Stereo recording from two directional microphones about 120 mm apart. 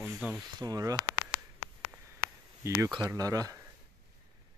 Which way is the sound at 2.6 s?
25° right (ahead or behind).